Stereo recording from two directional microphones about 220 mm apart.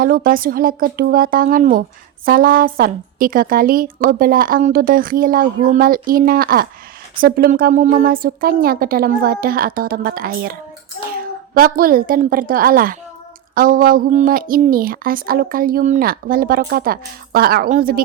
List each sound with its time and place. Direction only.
0.0 s a woman's voice: 40° right (ahead or behind)